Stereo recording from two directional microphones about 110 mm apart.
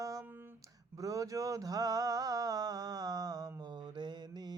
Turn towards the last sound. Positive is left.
turn(degrees=-40)  # may be behind; listen again after turning